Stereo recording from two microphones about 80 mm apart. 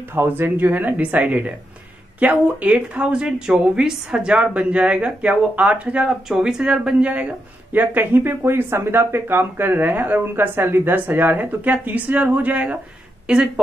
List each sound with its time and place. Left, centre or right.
0.1 s a woman's voice: right